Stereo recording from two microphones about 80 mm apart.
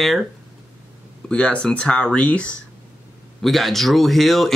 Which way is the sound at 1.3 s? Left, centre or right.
Centre.